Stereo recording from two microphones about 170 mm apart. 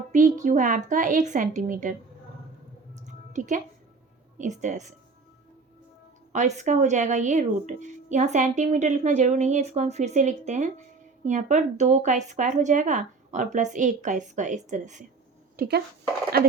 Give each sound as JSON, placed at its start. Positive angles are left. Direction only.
{"t": 0.1, "sound": "speech", "side_deg": -50}
{"t": 2.9, "sound": "music", "side_deg": -45}
{"t": 4.4, "sound": "speech", "side_deg": -45}
{"t": 6.3, "sound": "speech", "side_deg": -45}
{"t": 15.5, "sound": "speech", "side_deg": -70}